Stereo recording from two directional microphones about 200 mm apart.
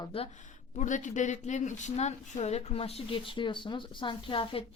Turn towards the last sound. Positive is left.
turn(degrees=25)  # may be behind; listen again after turning